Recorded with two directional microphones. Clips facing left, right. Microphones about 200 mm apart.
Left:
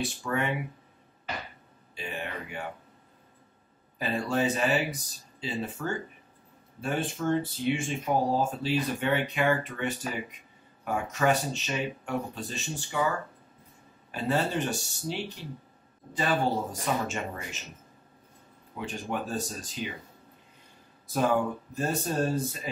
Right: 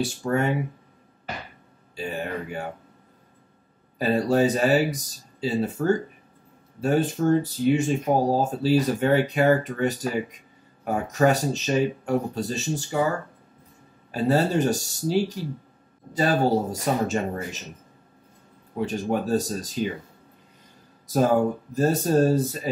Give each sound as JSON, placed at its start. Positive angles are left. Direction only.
{"t": 0.0, "sound": "speech", "side_deg": -40}
{"t": 2.0, "sound": "speech", "side_deg": -40}
{"t": 4.0, "sound": "speech", "side_deg": -40}
{"t": 14.1, "sound": "speech", "side_deg": -40}
{"t": 18.8, "sound": "speech", "side_deg": -40}
{"t": 21.1, "sound": "speech", "side_deg": -40}